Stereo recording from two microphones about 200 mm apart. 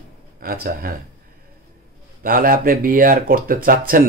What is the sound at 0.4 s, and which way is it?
Speech, 45° right (ahead or behind).